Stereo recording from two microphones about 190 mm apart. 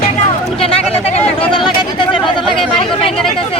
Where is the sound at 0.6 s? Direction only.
35° left (ahead or behind).